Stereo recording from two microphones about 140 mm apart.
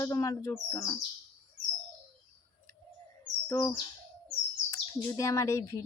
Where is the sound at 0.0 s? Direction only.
25° left (ahead or behind).